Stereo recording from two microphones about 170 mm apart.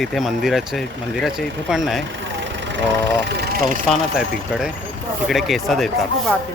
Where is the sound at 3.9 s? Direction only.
Centre (ahead or behind).